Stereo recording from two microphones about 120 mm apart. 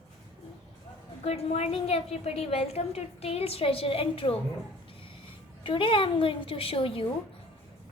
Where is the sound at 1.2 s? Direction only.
60° left (ahead or behind).